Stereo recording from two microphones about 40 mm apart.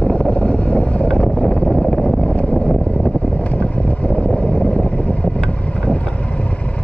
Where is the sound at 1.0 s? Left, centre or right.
Centre.